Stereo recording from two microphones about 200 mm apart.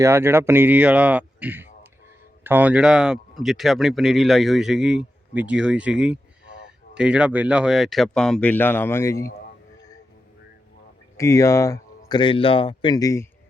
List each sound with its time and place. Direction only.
0.0 s speech: 10° right (ahead or behind); by 9.3 s 15° left (ahead or behind)
11.2 s speech: 15° left (ahead or behind)